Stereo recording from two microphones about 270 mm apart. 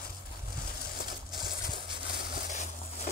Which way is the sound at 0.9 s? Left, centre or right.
Left.